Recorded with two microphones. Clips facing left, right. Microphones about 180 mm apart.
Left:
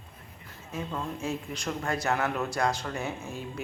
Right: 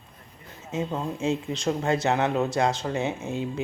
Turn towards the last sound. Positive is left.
turn(degrees=-25)  # may be behind; listen again after turning